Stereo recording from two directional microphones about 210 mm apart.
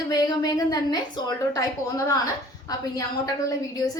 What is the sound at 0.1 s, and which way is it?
A woman's voice, 20° left (ahead or behind).